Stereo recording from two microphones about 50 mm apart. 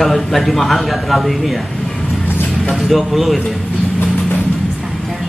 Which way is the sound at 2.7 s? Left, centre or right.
Centre.